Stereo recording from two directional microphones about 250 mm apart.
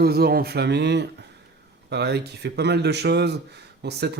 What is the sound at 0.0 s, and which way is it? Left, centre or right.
Speech, right.